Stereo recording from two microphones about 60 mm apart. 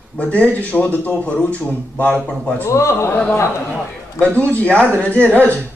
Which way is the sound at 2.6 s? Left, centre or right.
Left.